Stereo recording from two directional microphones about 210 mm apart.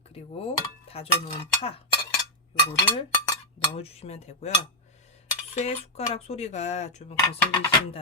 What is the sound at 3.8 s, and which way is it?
Speech, 30° left (ahead or behind).